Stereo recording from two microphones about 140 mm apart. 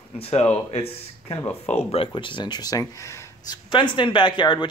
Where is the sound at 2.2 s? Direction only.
35° left (ahead or behind).